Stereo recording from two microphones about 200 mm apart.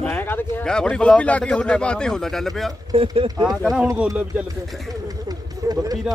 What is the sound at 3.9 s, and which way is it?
Speech, 5° right (ahead or behind).